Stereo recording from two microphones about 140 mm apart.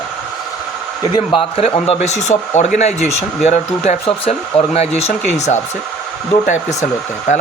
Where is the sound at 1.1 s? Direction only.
35° left (ahead or behind).